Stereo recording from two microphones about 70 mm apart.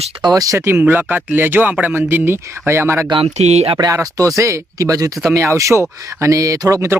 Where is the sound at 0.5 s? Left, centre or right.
Right.